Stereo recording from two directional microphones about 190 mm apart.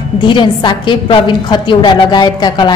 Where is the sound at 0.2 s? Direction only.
25° left (ahead or behind).